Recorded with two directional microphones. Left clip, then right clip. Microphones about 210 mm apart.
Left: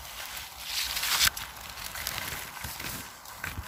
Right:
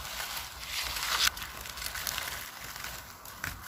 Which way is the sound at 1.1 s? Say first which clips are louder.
Left 2 dB; 30° left (ahead or behind).